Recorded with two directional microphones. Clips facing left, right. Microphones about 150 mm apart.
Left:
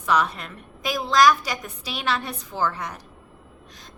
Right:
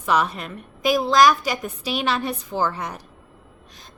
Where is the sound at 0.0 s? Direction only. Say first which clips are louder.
Right 1 dB; 5° right (ahead or behind).